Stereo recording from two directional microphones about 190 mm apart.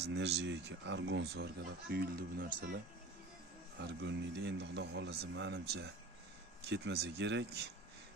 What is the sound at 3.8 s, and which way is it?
Speech, 65° right (ahead or behind).